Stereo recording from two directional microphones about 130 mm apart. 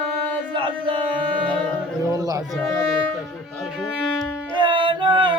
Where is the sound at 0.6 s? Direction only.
40° right (ahead or behind).